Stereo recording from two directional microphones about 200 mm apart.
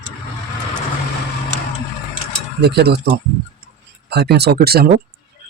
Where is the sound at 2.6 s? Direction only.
55° right (ahead or behind).